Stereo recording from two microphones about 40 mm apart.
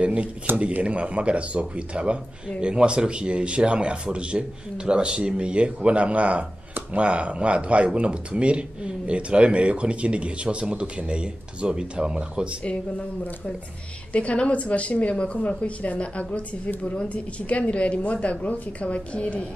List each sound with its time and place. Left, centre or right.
0.0 s a sound: right
0.8 s speech: right
12.6 s a woman's voice: left